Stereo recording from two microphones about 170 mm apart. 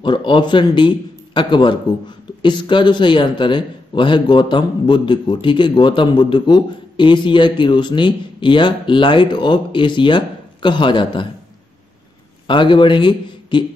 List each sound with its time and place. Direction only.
0.0 s a man's voice: 30° left (ahead or behind)
12.4 s a man's voice: 30° left (ahead or behind)